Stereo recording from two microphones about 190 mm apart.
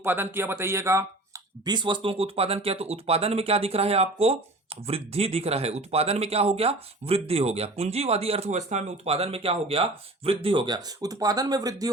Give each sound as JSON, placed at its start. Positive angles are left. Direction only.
{"t": 0.0, "sound": "speech", "side_deg": -10}